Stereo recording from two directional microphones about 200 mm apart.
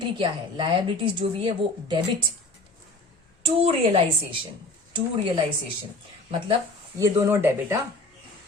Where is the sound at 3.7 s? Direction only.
25° right (ahead or behind).